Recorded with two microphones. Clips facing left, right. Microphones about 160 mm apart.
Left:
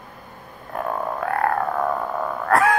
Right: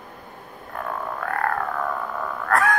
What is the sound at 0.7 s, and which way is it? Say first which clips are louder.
Frog: left 4 dB; 30° left (ahead or behind).